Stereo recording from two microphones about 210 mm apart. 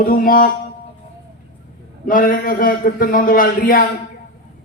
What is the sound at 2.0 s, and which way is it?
Music, 40° left (ahead or behind).